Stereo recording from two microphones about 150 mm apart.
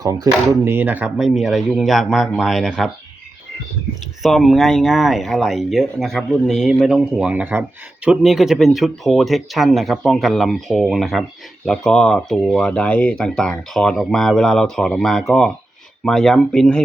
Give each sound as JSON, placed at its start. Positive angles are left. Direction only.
{"t": 0.0, "sound": "speech", "side_deg": -25}
{"t": 0.6, "sound": "speech", "side_deg": -15}
{"t": 4.2, "sound": "speech", "side_deg": 0}